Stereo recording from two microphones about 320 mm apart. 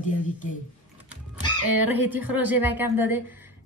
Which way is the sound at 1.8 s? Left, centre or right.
Centre.